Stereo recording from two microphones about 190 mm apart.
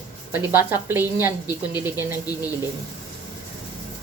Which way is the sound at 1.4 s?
20° left (ahead or behind).